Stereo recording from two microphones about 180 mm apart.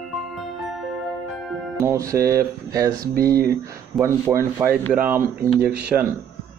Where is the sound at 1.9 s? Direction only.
15° right (ahead or behind).